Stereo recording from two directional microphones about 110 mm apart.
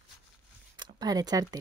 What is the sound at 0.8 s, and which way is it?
Speech, 35° right (ahead or behind).